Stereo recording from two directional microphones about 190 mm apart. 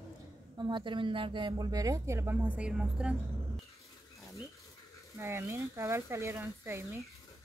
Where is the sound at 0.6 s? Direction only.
25° right (ahead or behind); by 3.1 s 5° right (ahead or behind).